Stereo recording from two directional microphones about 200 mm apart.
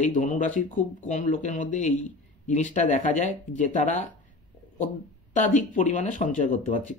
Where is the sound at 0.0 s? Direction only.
40° left (ahead or behind).